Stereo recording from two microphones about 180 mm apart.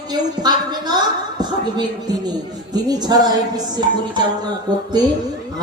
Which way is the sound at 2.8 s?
20° right (ahead or behind).